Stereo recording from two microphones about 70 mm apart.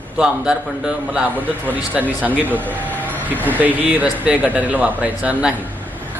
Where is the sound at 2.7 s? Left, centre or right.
Left.